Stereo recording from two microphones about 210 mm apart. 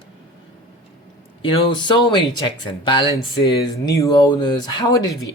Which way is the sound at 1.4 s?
25° left (ahead or behind).